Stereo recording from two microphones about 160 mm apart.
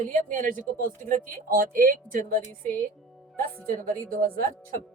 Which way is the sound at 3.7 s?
60° right (ahead or behind).